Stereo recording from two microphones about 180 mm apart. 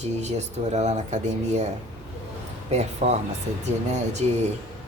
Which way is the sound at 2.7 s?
40° right (ahead or behind).